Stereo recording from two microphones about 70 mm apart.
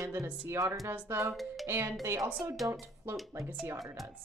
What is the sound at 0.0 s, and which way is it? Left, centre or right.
Speech, right.